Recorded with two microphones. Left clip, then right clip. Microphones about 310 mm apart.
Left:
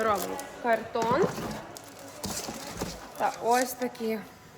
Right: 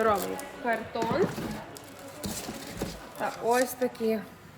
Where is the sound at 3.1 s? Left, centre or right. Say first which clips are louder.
Left 1 dB; centre.